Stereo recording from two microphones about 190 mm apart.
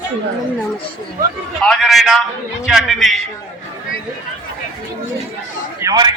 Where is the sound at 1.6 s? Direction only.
Centre (ahead or behind).